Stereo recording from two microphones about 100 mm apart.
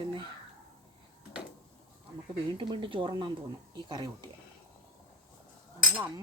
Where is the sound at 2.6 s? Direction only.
55° right (ahead or behind).